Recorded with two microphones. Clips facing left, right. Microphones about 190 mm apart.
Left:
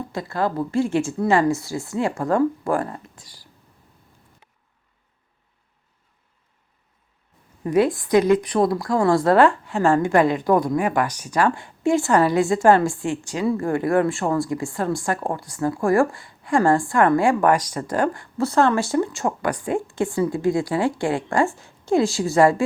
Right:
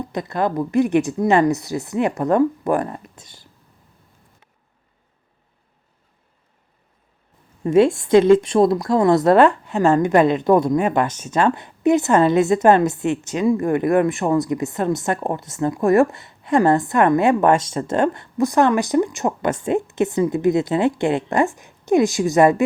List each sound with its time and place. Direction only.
0.1 s speech: 20° right (ahead or behind)
7.6 s speech: 25° right (ahead or behind)